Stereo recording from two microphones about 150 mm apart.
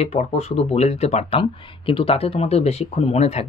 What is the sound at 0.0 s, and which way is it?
Speech, 45° left (ahead or behind).